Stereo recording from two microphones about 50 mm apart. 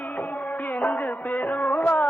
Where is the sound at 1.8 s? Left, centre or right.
Left.